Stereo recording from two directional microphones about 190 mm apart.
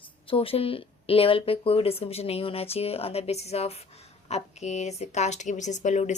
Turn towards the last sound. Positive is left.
turn(degrees=40)  # may be behind; listen again after turning